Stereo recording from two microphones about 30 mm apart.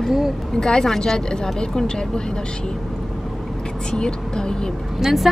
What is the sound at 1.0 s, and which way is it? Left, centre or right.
Speech, left.